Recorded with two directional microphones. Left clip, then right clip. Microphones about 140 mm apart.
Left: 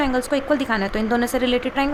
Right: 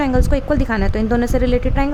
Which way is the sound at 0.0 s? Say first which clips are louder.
Right 2 dB; 35° right (ahead or behind).